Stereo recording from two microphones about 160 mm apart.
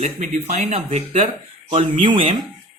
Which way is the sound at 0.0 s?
50° right (ahead or behind).